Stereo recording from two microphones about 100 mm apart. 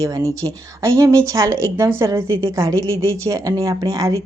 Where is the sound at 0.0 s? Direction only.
35° right (ahead or behind).